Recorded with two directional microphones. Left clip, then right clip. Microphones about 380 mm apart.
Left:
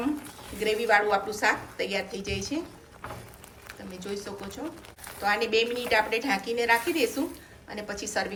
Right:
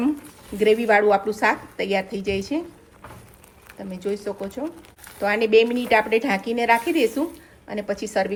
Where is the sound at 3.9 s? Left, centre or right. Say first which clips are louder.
Right 9 dB; centre.